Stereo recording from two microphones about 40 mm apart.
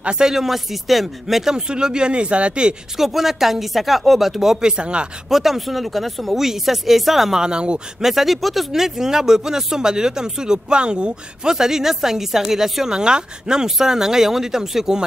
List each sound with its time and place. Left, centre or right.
0.2 s speech: centre; by 2.7 s right
3.0 s speech: centre; by 5.0 s right
5.3 s speech: centre
7.3 s speech: right
8.0 s speech: centre; by 11.5 s right
11.5 s speech: centre
12.9 s speech: centre